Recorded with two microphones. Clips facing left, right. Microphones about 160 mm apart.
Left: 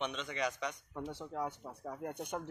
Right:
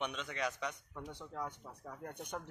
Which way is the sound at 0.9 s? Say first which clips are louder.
Left 5 dB; 25° left (ahead or behind).